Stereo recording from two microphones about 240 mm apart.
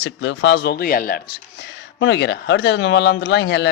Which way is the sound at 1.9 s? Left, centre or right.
Left.